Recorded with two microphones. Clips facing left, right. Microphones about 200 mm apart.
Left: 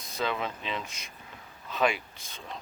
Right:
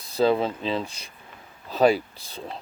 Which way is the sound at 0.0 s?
35° right (ahead or behind).